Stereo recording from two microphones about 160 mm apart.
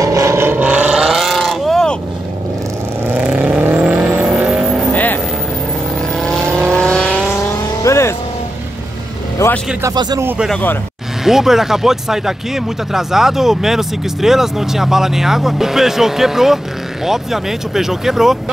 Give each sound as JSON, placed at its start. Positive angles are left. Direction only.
{"t": 0.0, "sound": "vehicle", "side_deg": -20}
{"t": 3.2, "sound": "vehicle", "side_deg": -10}
{"t": 4.9, "sound": "vehicle", "side_deg": 10}
{"t": 7.8, "sound": "vehicle", "side_deg": 20}
{"t": 9.4, "sound": "vehicle", "side_deg": 15}
{"t": 9.8, "sound": "speech", "side_deg": -20}
{"t": 10.2, "sound": "speech", "side_deg": -10}
{"t": 10.5, "sound": "speech", "side_deg": 10}
{"t": 11.2, "sound": "speech", "side_deg": 0}